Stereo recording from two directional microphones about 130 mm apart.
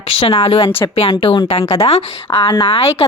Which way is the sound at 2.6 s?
45° left (ahead or behind).